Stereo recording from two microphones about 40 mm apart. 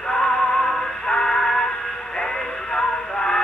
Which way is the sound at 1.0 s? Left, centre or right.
Centre.